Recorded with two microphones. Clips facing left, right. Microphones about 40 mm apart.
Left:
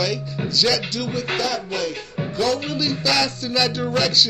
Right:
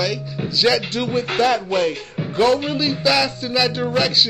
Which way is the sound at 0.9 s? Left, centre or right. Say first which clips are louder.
Right 4 dB; right.